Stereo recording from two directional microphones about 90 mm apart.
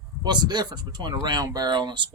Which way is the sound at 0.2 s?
50° right (ahead or behind).